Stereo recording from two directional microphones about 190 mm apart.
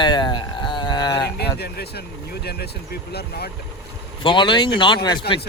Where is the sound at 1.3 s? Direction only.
60° left (ahead or behind).